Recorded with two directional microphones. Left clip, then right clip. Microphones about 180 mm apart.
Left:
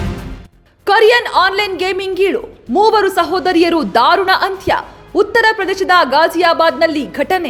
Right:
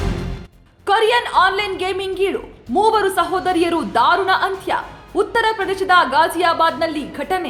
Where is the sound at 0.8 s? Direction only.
35° left (ahead or behind).